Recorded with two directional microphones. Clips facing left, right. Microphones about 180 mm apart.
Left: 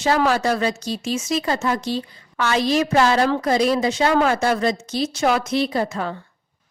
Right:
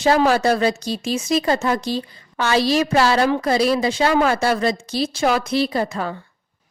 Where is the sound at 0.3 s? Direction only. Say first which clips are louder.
Right 3 dB; 35° right (ahead or behind).